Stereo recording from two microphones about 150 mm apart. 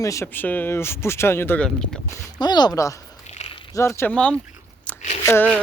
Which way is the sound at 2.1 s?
30° left (ahead or behind).